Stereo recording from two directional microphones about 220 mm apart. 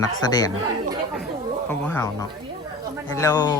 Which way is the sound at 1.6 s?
10° left (ahead or behind).